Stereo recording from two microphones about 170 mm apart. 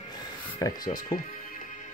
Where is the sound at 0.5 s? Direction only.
20° left (ahead or behind).